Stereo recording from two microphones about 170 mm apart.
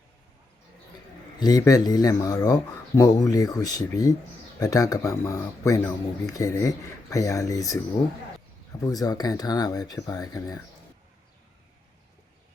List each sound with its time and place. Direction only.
1.4 s speech: 20° left (ahead or behind)
8.8 s speech: 20° left (ahead or behind)